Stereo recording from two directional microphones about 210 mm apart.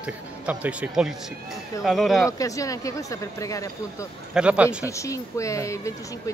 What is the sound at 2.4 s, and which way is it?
Speech, 15° left (ahead or behind).